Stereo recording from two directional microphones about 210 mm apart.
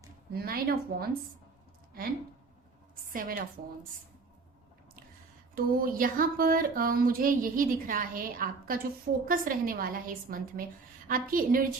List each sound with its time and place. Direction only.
0.3 s speech: 45° right (ahead or behind)
3.1 s a woman's voice: 40° right (ahead or behind)
5.5 s a woman's voice: 45° right (ahead or behind)